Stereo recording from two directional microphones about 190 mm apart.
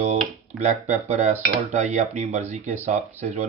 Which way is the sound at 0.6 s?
40° right (ahead or behind).